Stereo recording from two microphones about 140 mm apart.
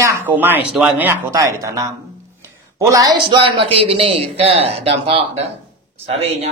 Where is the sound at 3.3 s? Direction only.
40° right (ahead or behind).